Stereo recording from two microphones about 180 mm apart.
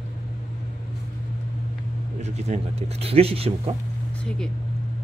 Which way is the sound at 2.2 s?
40° right (ahead or behind).